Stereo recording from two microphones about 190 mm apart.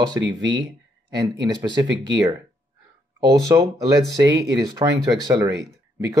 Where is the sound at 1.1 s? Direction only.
20° right (ahead or behind).